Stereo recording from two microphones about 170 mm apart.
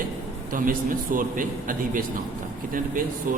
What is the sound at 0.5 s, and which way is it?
A man's voice, 55° right (ahead or behind).